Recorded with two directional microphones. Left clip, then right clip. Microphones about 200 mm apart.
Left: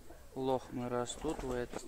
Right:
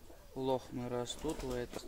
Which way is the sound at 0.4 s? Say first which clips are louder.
Left 1 dB; 15° right (ahead or behind).